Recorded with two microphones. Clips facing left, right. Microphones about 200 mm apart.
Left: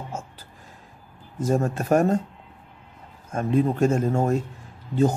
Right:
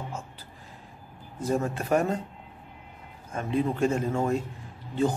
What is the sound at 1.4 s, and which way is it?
Speech, 45° left (ahead or behind).